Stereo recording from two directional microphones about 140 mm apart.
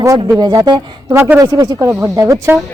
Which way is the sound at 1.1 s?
20° right (ahead or behind).